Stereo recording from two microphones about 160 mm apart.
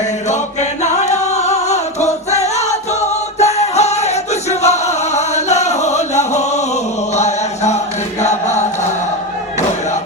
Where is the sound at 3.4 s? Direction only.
45° left (ahead or behind).